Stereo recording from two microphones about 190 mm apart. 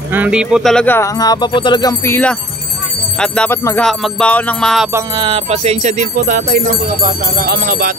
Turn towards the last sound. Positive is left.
turn(degrees=-50)  # may be behind; listen again after turning